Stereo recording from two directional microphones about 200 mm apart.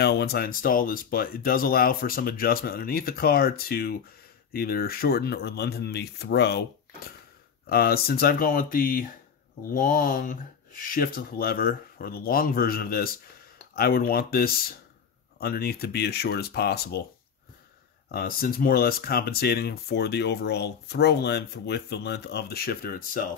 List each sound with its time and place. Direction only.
0.0 s speech: 55° left (ahead or behind)
7.6 s speech: 50° left (ahead or behind)
18.1 s speech: 45° left (ahead or behind)